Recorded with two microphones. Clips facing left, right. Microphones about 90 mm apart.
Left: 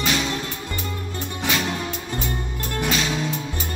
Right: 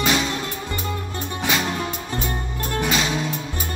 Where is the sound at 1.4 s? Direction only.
10° right (ahead or behind).